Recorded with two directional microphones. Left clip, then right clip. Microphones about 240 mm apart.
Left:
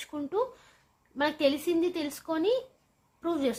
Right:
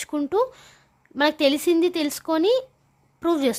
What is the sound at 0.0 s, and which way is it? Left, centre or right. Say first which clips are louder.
A woman's voice: right 8 dB; right.